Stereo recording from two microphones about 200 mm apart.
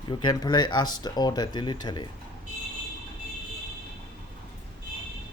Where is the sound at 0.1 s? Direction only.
20° left (ahead or behind).